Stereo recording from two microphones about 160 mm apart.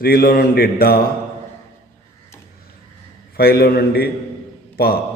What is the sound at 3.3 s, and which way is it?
A man's voice, 75° left (ahead or behind).